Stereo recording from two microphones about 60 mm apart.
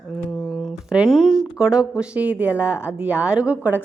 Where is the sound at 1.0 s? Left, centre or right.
Centre.